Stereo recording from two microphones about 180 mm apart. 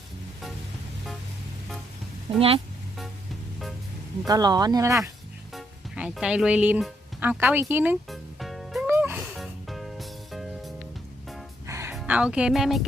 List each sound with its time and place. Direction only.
2.3 s speech: 30° right (ahead or behind)
4.3 s speech: 20° right (ahead or behind)
5.5 s speech: 5° right (ahead or behind)
8.1 s music: centre (ahead or behind)
8.9 s music: 10° right (ahead or behind)
9.3 s music: centre (ahead or behind)
11.6 s music: 15° right (ahead or behind)
11.9 s speech: 5° right (ahead or behind)